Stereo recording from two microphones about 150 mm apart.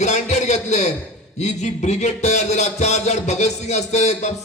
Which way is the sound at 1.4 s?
50° left (ahead or behind).